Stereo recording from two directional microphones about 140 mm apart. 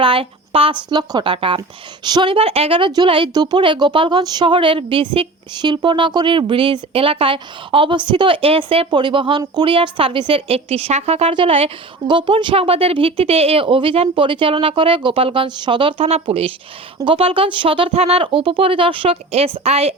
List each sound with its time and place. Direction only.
0.0 s a woman's voice: 40° right (ahead or behind)